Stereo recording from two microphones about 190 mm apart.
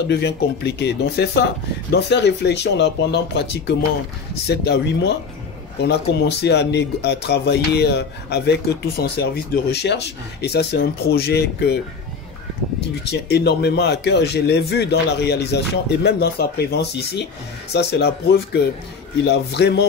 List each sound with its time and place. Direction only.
0.1 s speech: 60° left (ahead or behind)
12.8 s speech: 60° left (ahead or behind)